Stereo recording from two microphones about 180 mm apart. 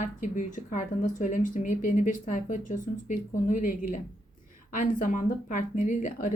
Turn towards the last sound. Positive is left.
turn(degrees=45)  # may be behind; listen again after turning